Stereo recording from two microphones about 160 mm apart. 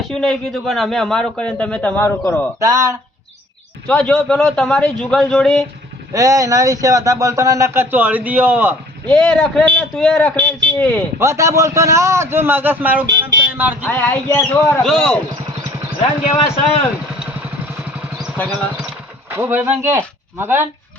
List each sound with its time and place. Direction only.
0.0 s a man's voice: 5° left (ahead or behind)
2.6 s speech: 20° right (ahead or behind)
3.8 s a man's voice: 5° left (ahead or behind)
6.1 s speech: 20° right (ahead or behind)
9.0 s a man's voice: 5° left (ahead or behind)
11.2 s a man's voice: 20° right (ahead or behind)
13.8 s a man's voice: 10° left (ahead or behind)
16.2 s a man's voice: 40° left (ahead or behind)
19.4 s a man's voice: 10° right (ahead or behind)